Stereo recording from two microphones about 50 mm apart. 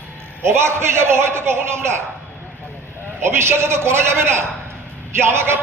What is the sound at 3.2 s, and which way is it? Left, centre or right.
A man's voice, right.